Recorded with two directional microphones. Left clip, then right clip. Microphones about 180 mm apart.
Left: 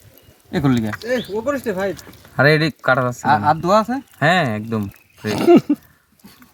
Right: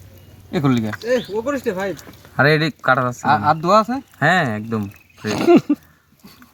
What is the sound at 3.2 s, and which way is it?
Speech, 15° right (ahead or behind).